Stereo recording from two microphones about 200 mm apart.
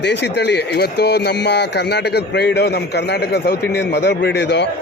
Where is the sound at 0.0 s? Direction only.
60° left (ahead or behind).